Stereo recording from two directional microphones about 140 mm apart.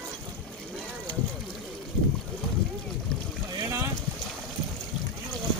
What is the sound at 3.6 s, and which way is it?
Boat, 20° right (ahead or behind).